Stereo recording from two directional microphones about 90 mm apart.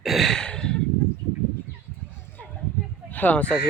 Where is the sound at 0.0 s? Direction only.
Centre (ahead or behind).